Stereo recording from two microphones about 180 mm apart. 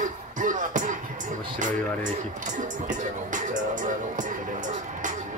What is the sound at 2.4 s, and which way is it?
Music, 45° right (ahead or behind).